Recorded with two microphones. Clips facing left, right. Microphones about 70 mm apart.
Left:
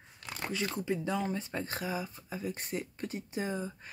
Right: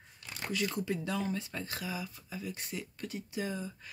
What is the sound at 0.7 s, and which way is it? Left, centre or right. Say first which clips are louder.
Speech: left 2 dB; left.